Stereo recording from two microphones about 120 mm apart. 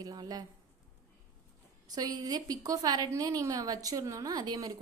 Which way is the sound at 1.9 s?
35° right (ahead or behind).